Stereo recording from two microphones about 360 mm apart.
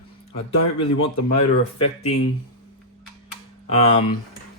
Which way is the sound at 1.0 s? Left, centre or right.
Left.